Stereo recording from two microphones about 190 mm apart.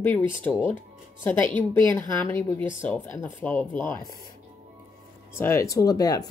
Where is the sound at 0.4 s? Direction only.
10° left (ahead or behind).